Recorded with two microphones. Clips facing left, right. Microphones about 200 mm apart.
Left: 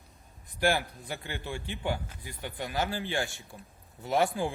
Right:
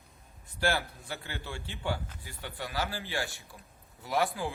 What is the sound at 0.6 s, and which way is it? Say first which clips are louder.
A man's voice: left 3 dB; 15° left (ahead or behind).